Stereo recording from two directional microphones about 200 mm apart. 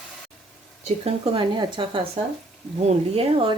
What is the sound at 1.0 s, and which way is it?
Speech, 30° right (ahead or behind).